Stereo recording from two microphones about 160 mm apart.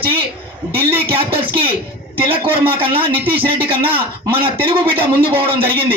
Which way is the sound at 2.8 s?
35° right (ahead or behind).